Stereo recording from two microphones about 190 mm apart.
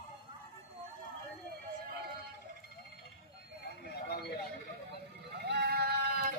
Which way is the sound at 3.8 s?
60° left (ahead or behind).